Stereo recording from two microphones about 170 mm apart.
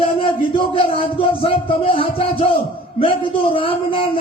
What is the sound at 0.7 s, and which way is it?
A man's voice, 35° left (ahead or behind).